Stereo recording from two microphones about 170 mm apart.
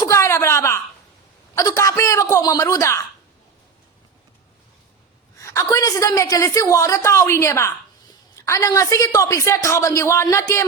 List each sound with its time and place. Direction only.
0.0 s a sound: 15° left (ahead or behind)
1.5 s a man's voice: 20° left (ahead or behind)
5.5 s a woman's voice: 15° left (ahead or behind)